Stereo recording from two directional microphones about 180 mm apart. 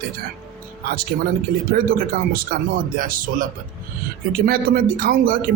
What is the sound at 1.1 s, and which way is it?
Speech, 55° right (ahead or behind).